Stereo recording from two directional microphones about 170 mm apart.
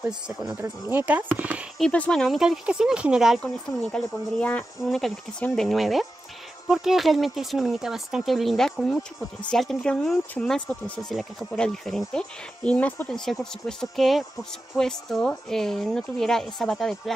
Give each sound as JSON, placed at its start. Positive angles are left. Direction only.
{"t": 0.3, "sound": "speech", "side_deg": 0}
{"t": 1.8, "sound": "speech", "side_deg": 5}
{"t": 3.9, "sound": "speech", "side_deg": 10}